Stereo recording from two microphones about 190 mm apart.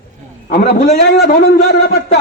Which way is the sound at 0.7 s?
55° left (ahead or behind).